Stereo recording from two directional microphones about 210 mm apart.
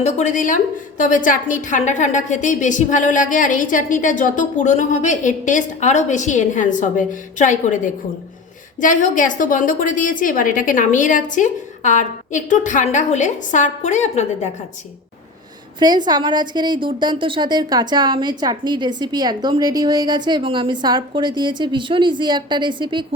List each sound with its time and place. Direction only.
0.0 s a woman's voice: 35° left (ahead or behind)
15.8 s a woman's voice: 20° right (ahead or behind)